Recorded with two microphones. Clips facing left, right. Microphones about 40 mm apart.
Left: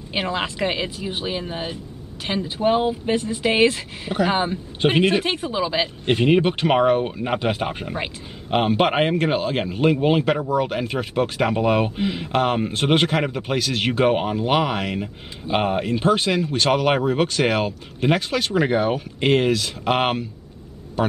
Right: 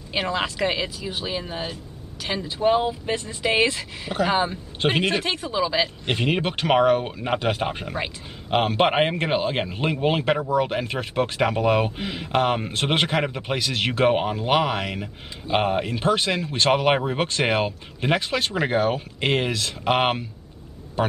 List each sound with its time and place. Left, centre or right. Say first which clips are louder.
0.1 s speech: even; centre
0.8 s speech: left 2 dB; left
1.2 s speech: left 1 dB; centre
2.6 s speech: left 1 dB; centre
4.1 s speech: left 1 dB; centre
5.2 s speech: left 1 dB; centre
9.8 s speech: left 4 dB; centre
12.7 s speech: left 3 dB; centre
16.4 s speech: right 2 dB; centre
18.7 s speech: left 1 dB; centre